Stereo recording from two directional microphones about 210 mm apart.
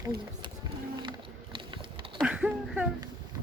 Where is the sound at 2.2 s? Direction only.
5° right (ahead or behind).